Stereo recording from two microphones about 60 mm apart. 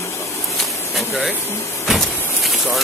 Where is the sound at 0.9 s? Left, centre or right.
Centre.